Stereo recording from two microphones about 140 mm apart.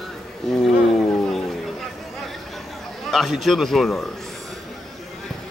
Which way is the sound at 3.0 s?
Centre (ahead or behind).